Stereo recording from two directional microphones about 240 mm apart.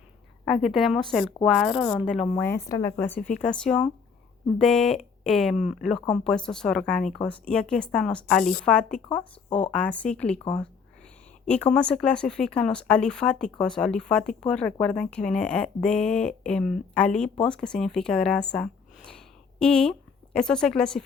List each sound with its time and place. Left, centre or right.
0.4 s speech: centre
10.3 s speech: centre
11.4 s speech: centre